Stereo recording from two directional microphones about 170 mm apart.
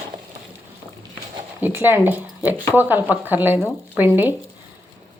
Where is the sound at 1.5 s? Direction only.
10° right (ahead or behind).